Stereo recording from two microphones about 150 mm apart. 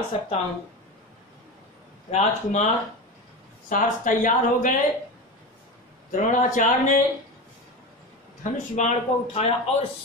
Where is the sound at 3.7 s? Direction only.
60° left (ahead or behind).